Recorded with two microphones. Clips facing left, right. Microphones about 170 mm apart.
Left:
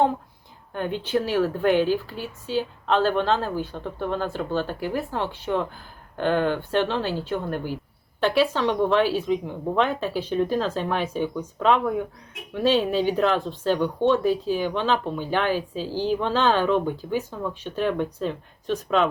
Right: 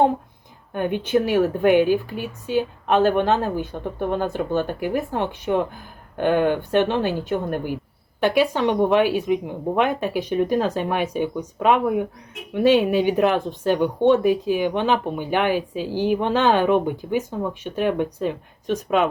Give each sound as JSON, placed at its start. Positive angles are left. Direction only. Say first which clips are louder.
{"t": 0.7, "sound": "speech", "louder": "right 4 dB", "side_deg": -15}